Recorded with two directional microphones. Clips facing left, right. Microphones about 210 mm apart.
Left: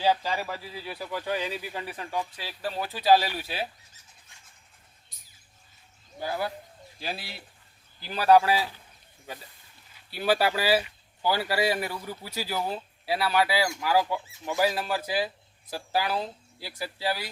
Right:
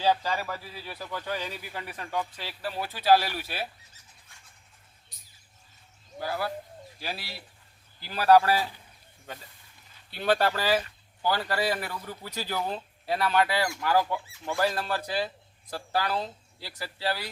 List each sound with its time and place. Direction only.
0.0 s speech: 10° left (ahead or behind)
6.1 s speech: 20° left (ahead or behind)
8.0 s speech: 15° left (ahead or behind)
10.1 s speech: 5° left (ahead or behind)